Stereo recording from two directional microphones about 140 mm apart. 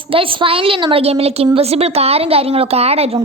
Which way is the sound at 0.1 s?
40° right (ahead or behind).